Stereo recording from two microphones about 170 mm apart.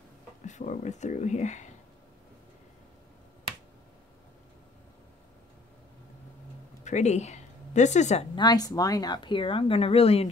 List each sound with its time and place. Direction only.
0.5 s speech: 45° left (ahead or behind)
6.8 s speech: 45° left (ahead or behind)
8.4 s speech: 25° left (ahead or behind)